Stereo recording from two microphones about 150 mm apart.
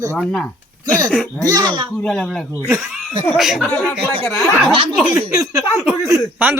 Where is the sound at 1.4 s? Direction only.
25° right (ahead or behind).